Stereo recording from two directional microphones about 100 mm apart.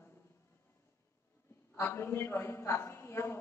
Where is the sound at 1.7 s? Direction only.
25° left (ahead or behind).